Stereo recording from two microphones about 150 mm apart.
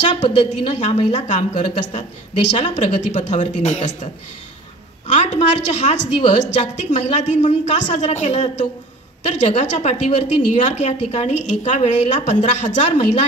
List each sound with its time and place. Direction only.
0.0 s a woman's voice: 50° left (ahead or behind)